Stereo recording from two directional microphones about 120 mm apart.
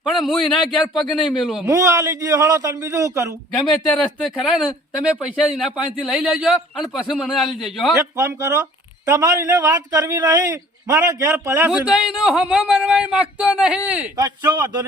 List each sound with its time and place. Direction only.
0.2 s a man's voice: centre (ahead or behind)
1.6 s a man's voice: 25° right (ahead or behind)
3.7 s a man's voice: 5° left (ahead or behind)
8.1 s a man's voice: 25° right (ahead or behind)
9.7 s a man's voice: 30° right (ahead or behind)
11.9 s speech: 5° right (ahead or behind)